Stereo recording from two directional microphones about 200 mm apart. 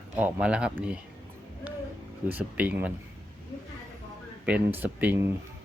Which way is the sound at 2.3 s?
10° right (ahead or behind).